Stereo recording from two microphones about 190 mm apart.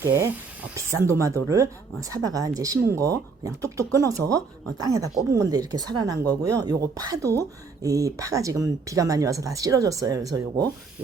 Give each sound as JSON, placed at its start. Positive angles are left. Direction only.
{"t": 0.0, "sound": "speech", "side_deg": -15}